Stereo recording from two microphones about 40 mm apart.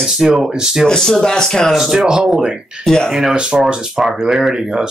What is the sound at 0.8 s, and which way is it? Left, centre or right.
Speech, centre.